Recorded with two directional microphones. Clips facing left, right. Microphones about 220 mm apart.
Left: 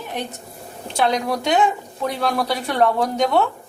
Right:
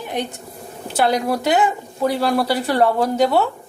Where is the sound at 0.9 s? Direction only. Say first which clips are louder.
Right 2 dB; 5° right (ahead or behind).